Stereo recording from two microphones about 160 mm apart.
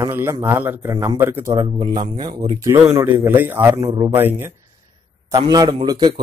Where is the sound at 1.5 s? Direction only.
30° right (ahead or behind).